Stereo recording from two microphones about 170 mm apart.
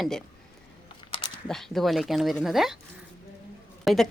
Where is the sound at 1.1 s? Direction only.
30° left (ahead or behind).